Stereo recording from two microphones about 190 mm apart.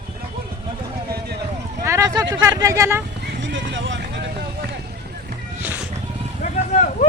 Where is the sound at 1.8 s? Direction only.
15° right (ahead or behind).